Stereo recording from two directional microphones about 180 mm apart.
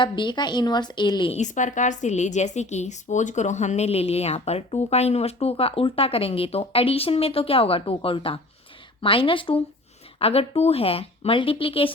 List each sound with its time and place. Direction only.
0.0 s a woman's voice: 25° left (ahead or behind)
1.4 s a woman's voice: 45° left (ahead or behind)